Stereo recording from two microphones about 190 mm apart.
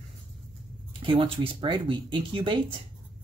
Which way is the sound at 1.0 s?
25° right (ahead or behind).